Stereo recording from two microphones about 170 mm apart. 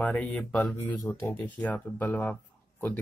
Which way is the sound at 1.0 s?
15° left (ahead or behind).